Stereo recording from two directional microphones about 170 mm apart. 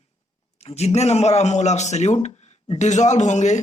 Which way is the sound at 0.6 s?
35° left (ahead or behind).